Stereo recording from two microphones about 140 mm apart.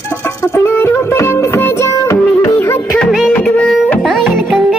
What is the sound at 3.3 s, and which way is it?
Music, 10° left (ahead or behind).